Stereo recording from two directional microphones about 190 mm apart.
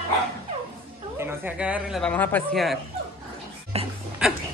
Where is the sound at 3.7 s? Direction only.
35° right (ahead or behind).